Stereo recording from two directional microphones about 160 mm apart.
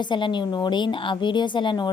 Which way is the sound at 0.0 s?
30° left (ahead or behind).